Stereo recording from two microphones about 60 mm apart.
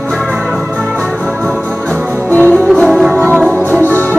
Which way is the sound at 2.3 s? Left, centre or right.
Left.